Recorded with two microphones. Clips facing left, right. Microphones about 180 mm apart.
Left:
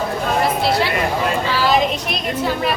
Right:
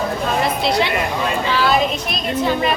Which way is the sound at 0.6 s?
5° left (ahead or behind).